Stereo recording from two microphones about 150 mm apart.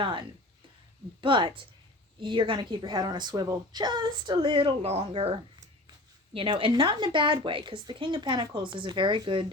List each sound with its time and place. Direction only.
0.0 s a woman's voice: 35° right (ahead or behind)